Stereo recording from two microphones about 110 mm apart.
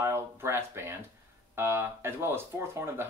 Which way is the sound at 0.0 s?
25° right (ahead or behind).